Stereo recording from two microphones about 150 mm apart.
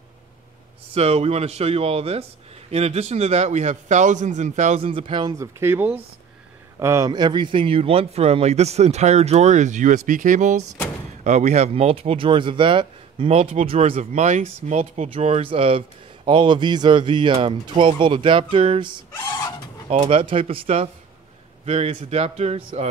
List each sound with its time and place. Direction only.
0.9 s speech: 45° right (ahead or behind)
4.7 s speech: 35° right (ahead or behind)
5.4 s speech: 15° right (ahead or behind)
7.1 s speech: 30° right (ahead or behind)
19.9 s speech: 45° right (ahead or behind)